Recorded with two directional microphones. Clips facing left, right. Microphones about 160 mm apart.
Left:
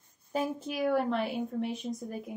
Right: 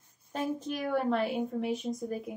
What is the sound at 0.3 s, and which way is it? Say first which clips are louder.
A woman's voice: left 1 dB; 5° left (ahead or behind).